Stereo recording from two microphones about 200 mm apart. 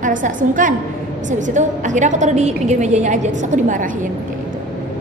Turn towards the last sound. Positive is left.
turn(degrees=-40)  # may be behind; listen again after turning